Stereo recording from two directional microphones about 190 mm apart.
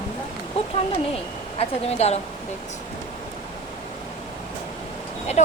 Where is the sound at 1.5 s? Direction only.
35° left (ahead or behind).